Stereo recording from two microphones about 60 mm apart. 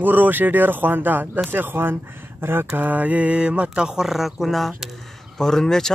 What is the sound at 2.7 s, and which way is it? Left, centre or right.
Speech, right.